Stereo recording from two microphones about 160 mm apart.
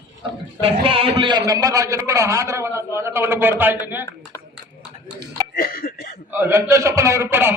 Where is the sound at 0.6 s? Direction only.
35° right (ahead or behind).